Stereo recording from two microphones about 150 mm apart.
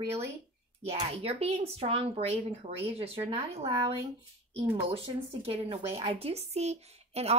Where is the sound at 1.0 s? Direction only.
45° right (ahead or behind).